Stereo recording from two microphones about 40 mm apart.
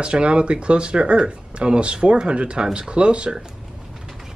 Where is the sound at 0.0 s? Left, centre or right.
Right.